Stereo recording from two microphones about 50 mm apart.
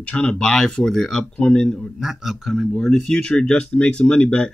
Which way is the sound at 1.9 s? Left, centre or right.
Centre.